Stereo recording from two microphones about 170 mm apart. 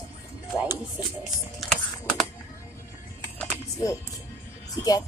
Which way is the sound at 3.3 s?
20° left (ahead or behind).